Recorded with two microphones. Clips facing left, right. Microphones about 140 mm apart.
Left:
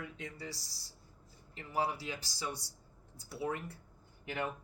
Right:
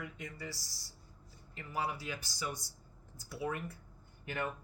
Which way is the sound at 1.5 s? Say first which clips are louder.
Left 3 dB; 30° left (ahead or behind).